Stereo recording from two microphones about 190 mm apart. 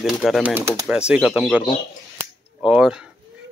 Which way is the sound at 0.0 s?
5° right (ahead or behind).